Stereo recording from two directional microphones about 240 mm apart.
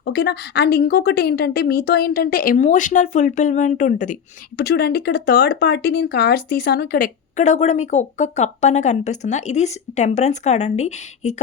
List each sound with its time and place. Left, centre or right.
0.0 s a woman's voice: left